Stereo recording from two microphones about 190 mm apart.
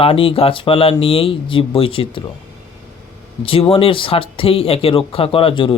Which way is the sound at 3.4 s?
30° left (ahead or behind).